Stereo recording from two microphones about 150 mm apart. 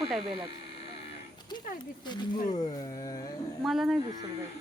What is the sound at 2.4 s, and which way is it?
Speech, 55° left (ahead or behind).